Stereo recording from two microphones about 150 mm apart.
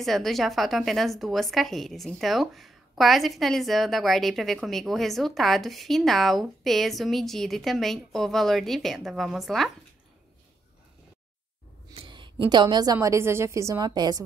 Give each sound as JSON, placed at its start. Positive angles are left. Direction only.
{"t": 0.0, "sound": "a woman's voice", "side_deg": 0}
{"t": 11.9, "sound": "a woman's voice", "side_deg": -35}